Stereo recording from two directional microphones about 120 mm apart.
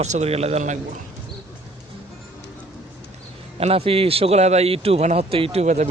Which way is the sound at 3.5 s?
55° right (ahead or behind).